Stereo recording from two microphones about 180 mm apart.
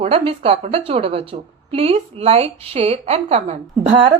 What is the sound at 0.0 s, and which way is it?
A woman's voice, 30° right (ahead or behind).